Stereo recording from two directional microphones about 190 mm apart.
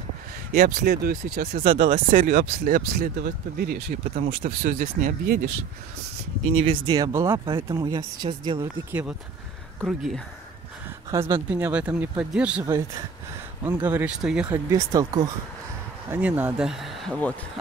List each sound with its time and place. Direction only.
0.5 s speech: 50° right (ahead or behind)
1.6 s speech: 30° right (ahead or behind)
2.1 s speech: 50° right (ahead or behind)
4.4 s speech: 35° right (ahead or behind)
4.7 s speech: 50° right (ahead or behind)
6.5 s speech: 25° right (ahead or behind)
9.8 s speech: centre (ahead or behind)
11.1 s speech: 15° right (ahead or behind)
12.6 s speech: 15° right (ahead or behind)
14.7 s speech: 20° right (ahead or behind); by 17.3 s centre (ahead or behind)